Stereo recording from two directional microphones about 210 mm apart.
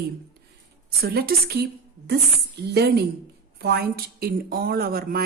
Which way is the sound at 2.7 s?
50° right (ahead or behind).